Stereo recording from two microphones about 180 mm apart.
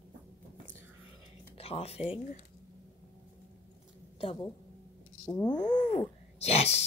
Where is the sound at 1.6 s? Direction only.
35° left (ahead or behind).